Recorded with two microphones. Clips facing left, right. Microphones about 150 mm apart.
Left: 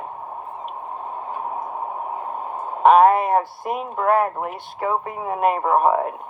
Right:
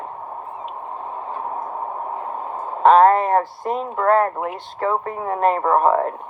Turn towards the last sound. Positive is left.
turn(degrees=10)  # may be behind; listen again after turning